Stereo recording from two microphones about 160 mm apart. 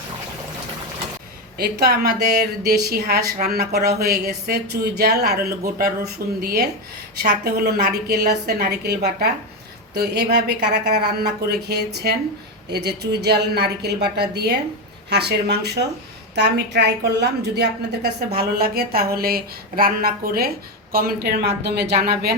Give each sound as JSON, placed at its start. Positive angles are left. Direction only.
{"t": 1.8, "sound": "a woman's voice", "side_deg": -75}